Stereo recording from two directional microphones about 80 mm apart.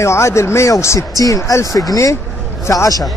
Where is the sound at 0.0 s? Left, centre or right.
Left.